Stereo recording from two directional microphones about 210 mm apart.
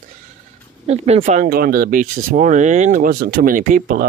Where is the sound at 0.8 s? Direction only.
30° right (ahead or behind).